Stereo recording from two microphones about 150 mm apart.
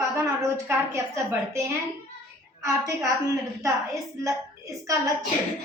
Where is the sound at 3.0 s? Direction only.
20° right (ahead or behind).